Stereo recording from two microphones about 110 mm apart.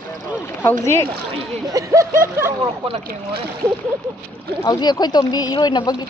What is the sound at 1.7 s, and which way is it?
Speech, 30° right (ahead or behind).